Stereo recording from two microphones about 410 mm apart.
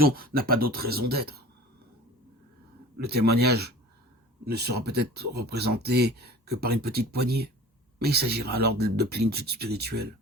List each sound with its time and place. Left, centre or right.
0.0 s speech: right
3.0 s speech: right